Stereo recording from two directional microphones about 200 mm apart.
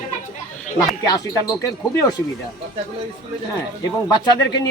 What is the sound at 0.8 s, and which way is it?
Speech, 20° left (ahead or behind).